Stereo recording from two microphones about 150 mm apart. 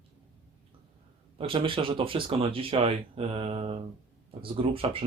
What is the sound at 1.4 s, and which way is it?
Speech, 35° right (ahead or behind).